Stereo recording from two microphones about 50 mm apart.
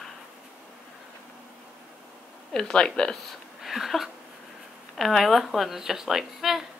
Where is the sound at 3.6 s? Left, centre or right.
Centre.